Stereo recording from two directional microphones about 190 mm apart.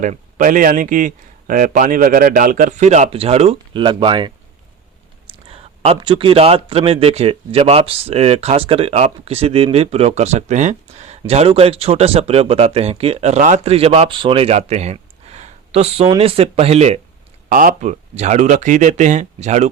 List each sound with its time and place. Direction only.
0.0 s a man's voice: 45° right (ahead or behind); by 4.3 s 25° right (ahead or behind)
5.3 s speech: 30° right (ahead or behind)
17.5 s speech: 45° right (ahead or behind)